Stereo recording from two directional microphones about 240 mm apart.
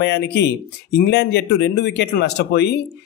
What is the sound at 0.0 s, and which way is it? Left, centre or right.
A man's voice, left.